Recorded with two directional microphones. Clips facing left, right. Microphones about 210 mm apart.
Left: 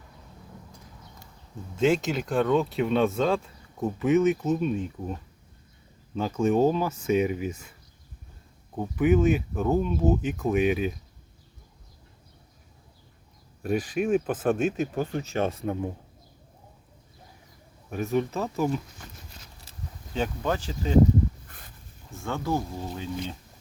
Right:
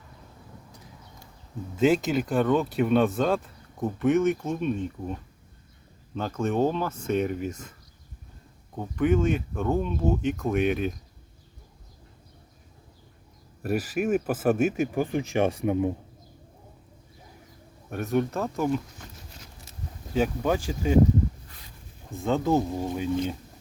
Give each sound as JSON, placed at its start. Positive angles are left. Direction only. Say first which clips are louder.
{"t": 1.7, "sound": "speech", "louder": "right 2 dB", "side_deg": -5}
{"t": 6.1, "sound": "speech", "louder": "left 3 dB", "side_deg": 5}
{"t": 8.8, "sound": "speech", "louder": "left 2 dB", "side_deg": 5}
{"t": 13.6, "sound": "speech", "louder": "even", "side_deg": -5}
{"t": 17.9, "sound": "speech", "louder": "right 1 dB", "side_deg": 0}
{"t": 20.1, "sound": "speech", "louder": "right 3 dB", "side_deg": -10}
{"t": 22.2, "sound": "speech", "louder": "right 5 dB", "side_deg": -20}